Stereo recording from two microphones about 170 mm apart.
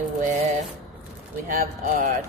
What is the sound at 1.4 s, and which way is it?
Speech, 55° right (ahead or behind).